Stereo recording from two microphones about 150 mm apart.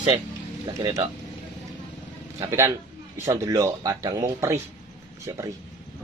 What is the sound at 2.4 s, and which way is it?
Speech, 20° right (ahead or behind).